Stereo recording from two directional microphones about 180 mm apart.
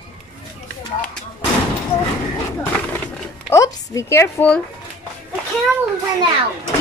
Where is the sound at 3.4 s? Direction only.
15° left (ahead or behind).